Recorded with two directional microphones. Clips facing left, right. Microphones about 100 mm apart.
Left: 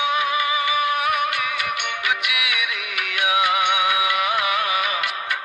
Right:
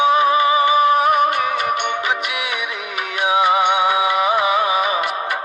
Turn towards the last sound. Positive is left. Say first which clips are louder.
# right 5 dB
turn(degrees=-25)  # may be behind; listen again after turning